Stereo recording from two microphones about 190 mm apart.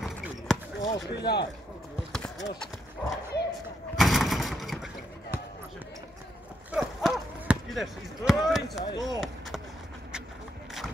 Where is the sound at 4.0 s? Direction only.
Centre (ahead or behind).